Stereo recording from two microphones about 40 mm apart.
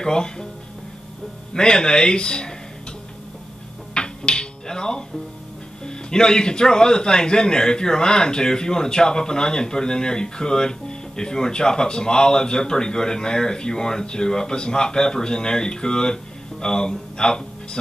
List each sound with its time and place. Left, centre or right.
0.0 s speech: centre
1.5 s speech: centre
3.9 s dishes: left
5.9 s speech: centre